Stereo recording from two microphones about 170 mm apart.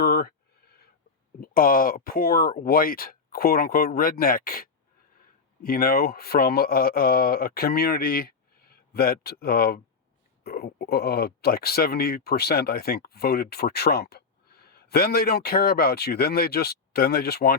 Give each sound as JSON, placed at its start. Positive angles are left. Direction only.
{"t": 0.0, "sound": "speech", "side_deg": 65}
{"t": 1.4, "sound": "speech", "side_deg": 55}